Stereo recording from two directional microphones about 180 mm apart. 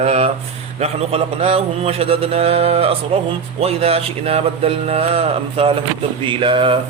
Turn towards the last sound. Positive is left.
turn(degrees=-30)  # may be behind; listen again after turning